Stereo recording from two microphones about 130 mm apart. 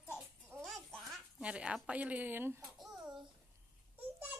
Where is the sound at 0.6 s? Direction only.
Centre (ahead or behind); by 2.6 s 15° right (ahead or behind).